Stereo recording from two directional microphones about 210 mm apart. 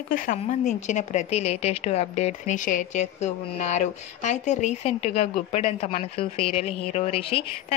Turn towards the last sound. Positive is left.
turn(degrees=30)  # may be behind; listen again after turning